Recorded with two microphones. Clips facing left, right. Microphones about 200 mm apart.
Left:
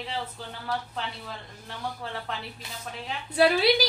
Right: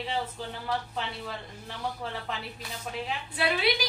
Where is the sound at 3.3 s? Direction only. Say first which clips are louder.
Left 7 dB; 40° left (ahead or behind).